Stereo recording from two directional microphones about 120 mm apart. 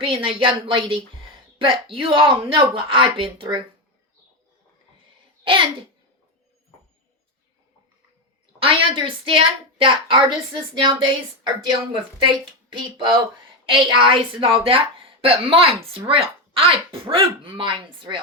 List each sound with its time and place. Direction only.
0.0 s a woman's voice: 45° right (ahead or behind)
8.5 s a woman's voice: 45° right (ahead or behind)
13.7 s a woman's voice: 45° right (ahead or behind)